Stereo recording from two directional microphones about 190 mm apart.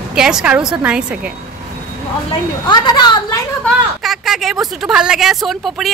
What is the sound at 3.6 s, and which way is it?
Speech, centre (ahead or behind).